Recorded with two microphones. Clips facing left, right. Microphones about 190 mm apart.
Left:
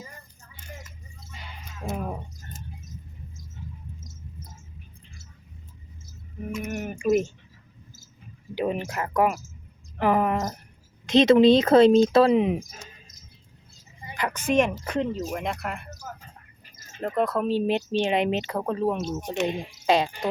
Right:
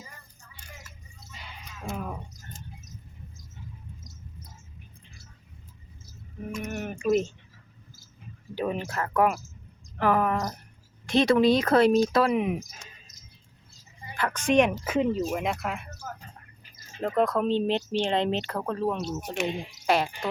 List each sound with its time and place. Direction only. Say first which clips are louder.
1.8 s speech: left 3 dB; 20° left (ahead or behind)
6.8 s a sound: left 2 dB; 10° left (ahead or behind)
8.5 s speech: left 2 dB; 15° left (ahead or behind)
14.1 s speech: even; 15° left (ahead or behind)
17.0 s speech: even; centre (ahead or behind); by 19.1 s 15° left (ahead or behind)
19.2 s speech: left 3 dB; 10° right (ahead or behind)
19.9 s speech: left 3 dB; 20° left (ahead or behind)